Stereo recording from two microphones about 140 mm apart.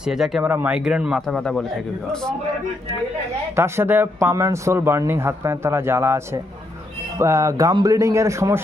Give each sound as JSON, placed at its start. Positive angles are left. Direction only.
{"t": 0.0, "sound": "speech", "side_deg": -5}
{"t": 3.5, "sound": "speech", "side_deg": -20}